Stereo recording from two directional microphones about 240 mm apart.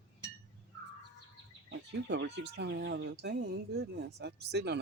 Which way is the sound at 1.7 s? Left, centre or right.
Right.